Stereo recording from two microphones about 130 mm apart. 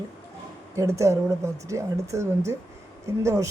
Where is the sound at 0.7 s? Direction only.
25° right (ahead or behind).